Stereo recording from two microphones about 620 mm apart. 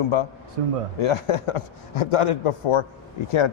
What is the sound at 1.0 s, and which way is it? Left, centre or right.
A man's voice, left.